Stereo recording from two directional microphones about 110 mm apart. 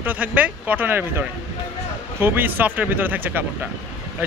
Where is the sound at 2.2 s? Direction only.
20° right (ahead or behind).